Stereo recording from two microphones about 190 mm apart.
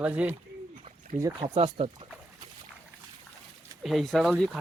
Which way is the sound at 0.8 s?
40° right (ahead or behind).